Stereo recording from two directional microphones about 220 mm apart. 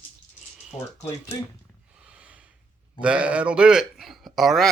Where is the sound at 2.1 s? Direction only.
5° right (ahead or behind).